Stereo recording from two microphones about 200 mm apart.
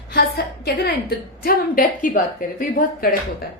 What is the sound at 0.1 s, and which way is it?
A woman's voice, 50° left (ahead or behind).